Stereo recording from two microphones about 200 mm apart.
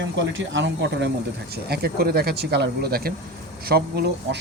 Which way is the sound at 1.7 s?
50° right (ahead or behind).